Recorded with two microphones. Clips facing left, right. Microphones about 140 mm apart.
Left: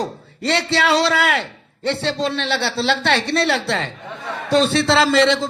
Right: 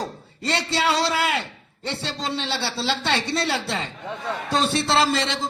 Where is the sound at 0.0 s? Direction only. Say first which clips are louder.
Left 5 dB; 70° left (ahead or behind).